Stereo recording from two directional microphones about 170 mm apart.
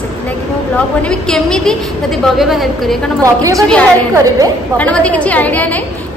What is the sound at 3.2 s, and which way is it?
Speech, 20° right (ahead or behind).